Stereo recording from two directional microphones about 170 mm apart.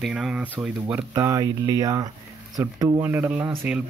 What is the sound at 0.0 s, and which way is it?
Speech, 5° right (ahead or behind).